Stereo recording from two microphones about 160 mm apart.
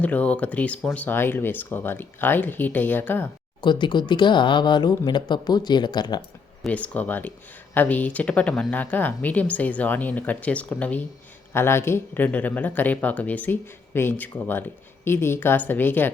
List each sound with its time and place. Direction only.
0.0 s speech: 10° left (ahead or behind)
3.6 s speech: 30° left (ahead or behind)
6.7 s speech: 10° left (ahead or behind)